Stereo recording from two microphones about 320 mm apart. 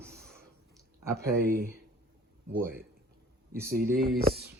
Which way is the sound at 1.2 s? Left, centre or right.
Right.